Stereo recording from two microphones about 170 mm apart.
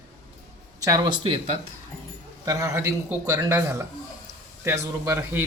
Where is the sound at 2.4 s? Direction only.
20° right (ahead or behind).